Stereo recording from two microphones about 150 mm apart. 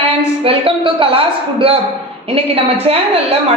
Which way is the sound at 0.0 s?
40° right (ahead or behind).